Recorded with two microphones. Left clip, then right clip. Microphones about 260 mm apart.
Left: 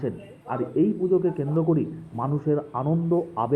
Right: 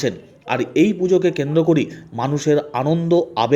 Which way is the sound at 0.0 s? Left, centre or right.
Right.